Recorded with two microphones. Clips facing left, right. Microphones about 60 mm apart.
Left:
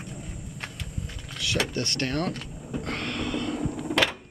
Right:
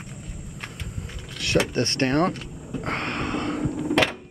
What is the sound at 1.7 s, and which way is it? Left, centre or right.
Speech, right.